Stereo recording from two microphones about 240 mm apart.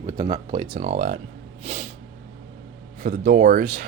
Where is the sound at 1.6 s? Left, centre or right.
Right.